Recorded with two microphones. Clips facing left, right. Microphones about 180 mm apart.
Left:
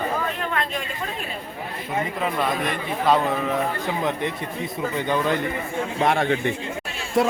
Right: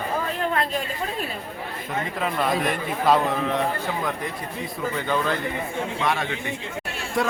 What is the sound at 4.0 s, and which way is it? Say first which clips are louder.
Speech: left 3 dB; 20° left (ahead or behind).